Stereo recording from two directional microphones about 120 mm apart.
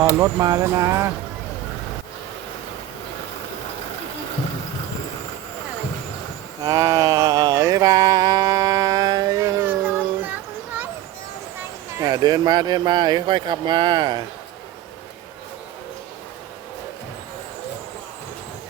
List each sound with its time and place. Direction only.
0.2 s speech: 30° right (ahead or behind)
6.7 s mantra: 30° right (ahead or behind)
12.0 s speech: 35° right (ahead or behind)